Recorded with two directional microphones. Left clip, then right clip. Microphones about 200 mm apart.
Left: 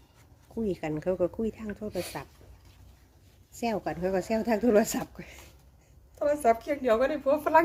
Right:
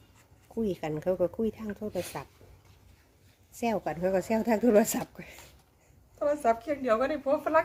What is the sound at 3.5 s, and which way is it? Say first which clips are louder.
Speech: right 1 dB; 15° right (ahead or behind).